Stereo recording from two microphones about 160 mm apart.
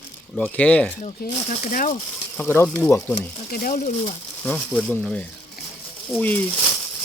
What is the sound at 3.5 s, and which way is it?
Speech, 65° left (ahead or behind).